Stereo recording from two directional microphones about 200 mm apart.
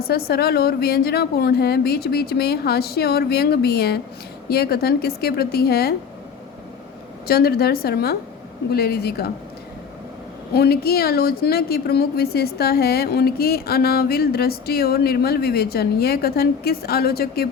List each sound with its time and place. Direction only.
0.0 s a woman's voice: 50° left (ahead or behind)
7.3 s a woman's voice: 50° left (ahead or behind)
10.5 s a woman's voice: 50° left (ahead or behind)